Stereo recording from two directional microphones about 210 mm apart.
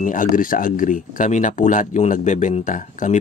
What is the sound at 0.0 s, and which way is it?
Speech, 40° left (ahead or behind).